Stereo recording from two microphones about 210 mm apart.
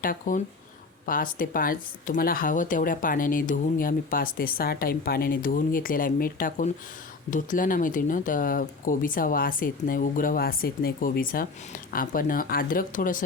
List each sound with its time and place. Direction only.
0.0 s speech: 40° left (ahead or behind)